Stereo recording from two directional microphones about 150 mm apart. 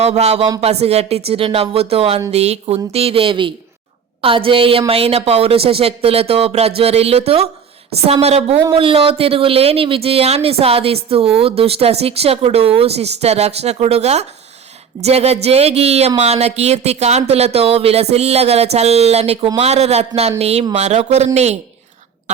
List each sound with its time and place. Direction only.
0.0 s speech: 45° right (ahead or behind)